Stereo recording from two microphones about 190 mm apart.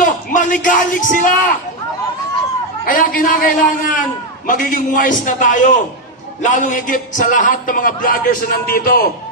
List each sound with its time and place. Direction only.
0.0 s speech: 45° left (ahead or behind)
2.9 s a man's voice: 45° left (ahead or behind)